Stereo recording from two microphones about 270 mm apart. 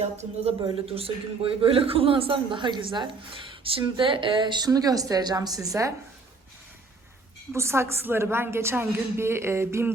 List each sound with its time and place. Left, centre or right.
0.0 s a woman's voice: right
7.5 s a woman's voice: centre